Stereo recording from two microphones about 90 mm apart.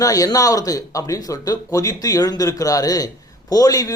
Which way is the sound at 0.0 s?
40° left (ahead or behind).